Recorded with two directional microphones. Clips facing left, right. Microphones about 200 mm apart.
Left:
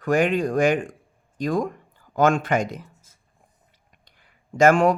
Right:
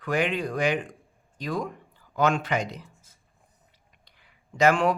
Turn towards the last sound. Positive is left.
turn(degrees=45)  # may be behind; listen again after turning